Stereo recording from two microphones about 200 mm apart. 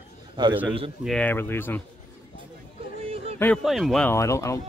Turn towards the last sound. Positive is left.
turn(degrees=15)  # may be behind; listen again after turning